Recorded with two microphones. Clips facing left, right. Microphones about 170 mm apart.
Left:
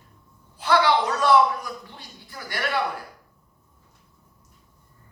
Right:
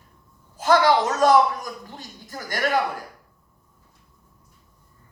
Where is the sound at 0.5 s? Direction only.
45° right (ahead or behind).